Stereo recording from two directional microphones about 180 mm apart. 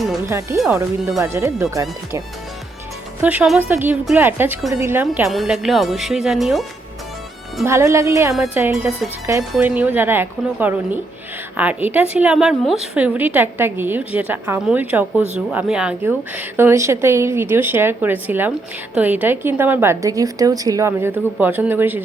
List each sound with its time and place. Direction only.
0.3 s a woman's voice: 15° right (ahead or behind)
3.2 s a woman's voice: 10° right (ahead or behind)
5.3 s speech: centre (ahead or behind)
7.6 s a woman's voice: 15° right (ahead or behind)